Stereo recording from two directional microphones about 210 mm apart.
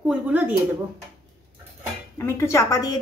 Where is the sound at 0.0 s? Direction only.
5° right (ahead or behind).